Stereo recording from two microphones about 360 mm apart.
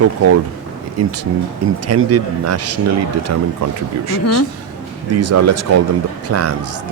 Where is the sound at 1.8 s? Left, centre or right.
Right.